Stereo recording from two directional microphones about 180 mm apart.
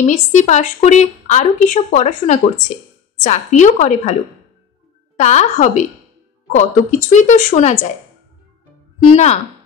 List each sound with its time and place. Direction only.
0.1 s a woman's voice: 40° left (ahead or behind)
9.1 s speech: 40° left (ahead or behind)